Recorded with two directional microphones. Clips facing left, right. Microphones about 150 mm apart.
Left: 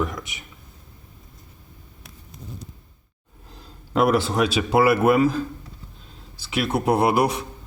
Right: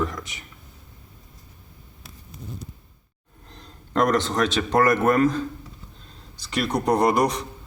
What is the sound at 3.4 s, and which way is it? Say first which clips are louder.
A man's voice: even; 5° left (ahead or behind).